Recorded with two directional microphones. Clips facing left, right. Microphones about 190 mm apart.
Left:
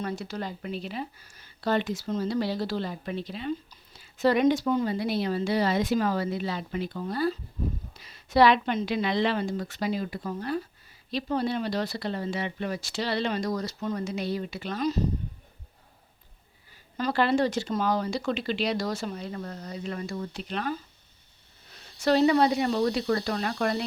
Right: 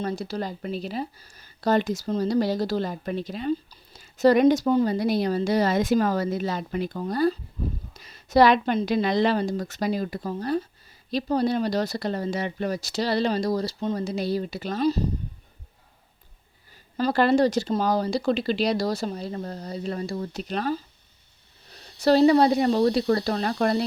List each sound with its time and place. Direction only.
0.0 s speech: 35° right (ahead or behind)
16.7 s speech: 40° right (ahead or behind)
21.9 s speech: 35° right (ahead or behind)